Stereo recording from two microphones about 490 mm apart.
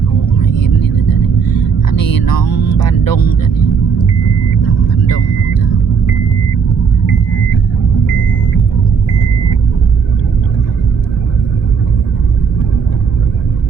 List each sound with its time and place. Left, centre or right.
1.4 s music: left